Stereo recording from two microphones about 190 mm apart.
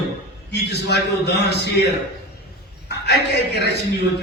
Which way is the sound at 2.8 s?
60° left (ahead or behind).